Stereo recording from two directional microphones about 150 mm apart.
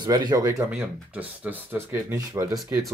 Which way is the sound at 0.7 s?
10° right (ahead or behind).